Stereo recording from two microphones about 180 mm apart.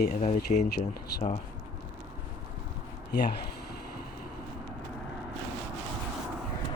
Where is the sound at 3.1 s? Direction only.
65° left (ahead or behind).